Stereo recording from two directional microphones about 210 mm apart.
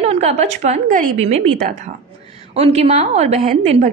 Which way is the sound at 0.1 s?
30° right (ahead or behind).